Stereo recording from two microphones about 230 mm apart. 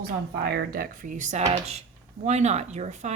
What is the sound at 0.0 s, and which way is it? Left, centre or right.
Speech, right.